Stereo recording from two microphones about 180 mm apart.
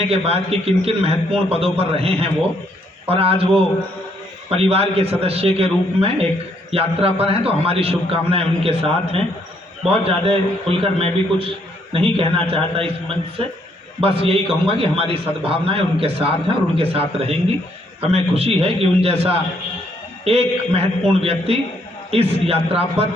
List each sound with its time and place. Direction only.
0.0 s a man's voice: 35° right (ahead or behind)